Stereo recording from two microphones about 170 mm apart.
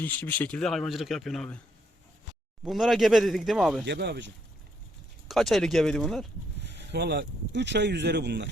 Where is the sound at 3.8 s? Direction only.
85° right.